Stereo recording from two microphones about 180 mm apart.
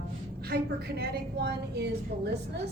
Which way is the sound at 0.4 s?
60° right (ahead or behind).